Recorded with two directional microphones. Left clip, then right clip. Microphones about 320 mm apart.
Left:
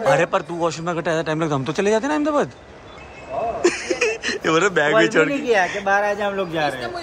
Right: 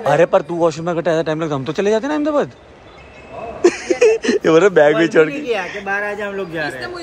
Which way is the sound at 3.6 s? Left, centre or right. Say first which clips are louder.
Right 9 dB; centre.